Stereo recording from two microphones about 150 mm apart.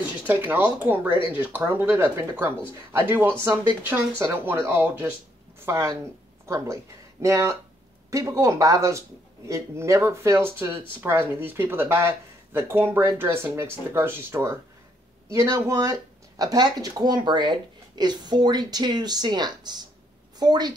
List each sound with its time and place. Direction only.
0.3 s a woman's voice: 10° right (ahead or behind); by 20.7 s 30° right (ahead or behind)